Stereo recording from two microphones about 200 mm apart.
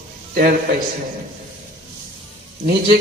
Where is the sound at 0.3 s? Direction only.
45° right (ahead or behind).